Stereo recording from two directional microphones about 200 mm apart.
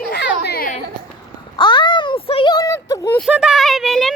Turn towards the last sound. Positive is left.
turn(degrees=0)  # may be behind; listen again after turning